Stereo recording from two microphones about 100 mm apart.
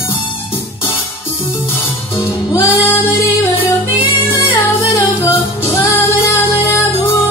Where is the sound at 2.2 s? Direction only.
30° left (ahead or behind).